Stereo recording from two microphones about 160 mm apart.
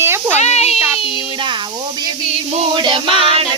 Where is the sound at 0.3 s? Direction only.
45° left (ahead or behind).